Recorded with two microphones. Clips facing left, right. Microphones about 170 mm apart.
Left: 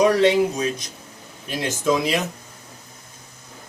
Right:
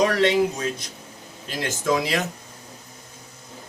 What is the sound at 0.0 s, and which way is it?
Speech, 15° left (ahead or behind).